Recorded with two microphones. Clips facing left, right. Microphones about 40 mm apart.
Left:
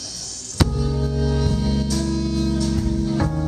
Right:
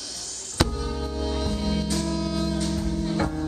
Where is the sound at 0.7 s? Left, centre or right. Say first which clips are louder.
Left 6 dB; right.